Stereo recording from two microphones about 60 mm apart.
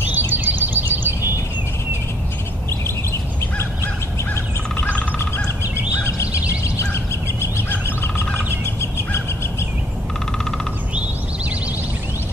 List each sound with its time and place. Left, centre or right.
0.3 s a sound: right
3.1 s bird: left
4.7 s bird: left
7.5 s bird: left